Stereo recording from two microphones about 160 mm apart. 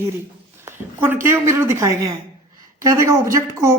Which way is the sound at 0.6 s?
10° right (ahead or behind).